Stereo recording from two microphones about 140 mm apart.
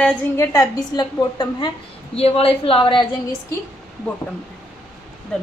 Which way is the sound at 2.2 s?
45° left (ahead or behind).